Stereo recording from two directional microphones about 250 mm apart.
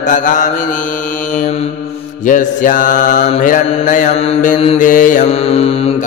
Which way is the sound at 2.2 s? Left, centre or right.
Left.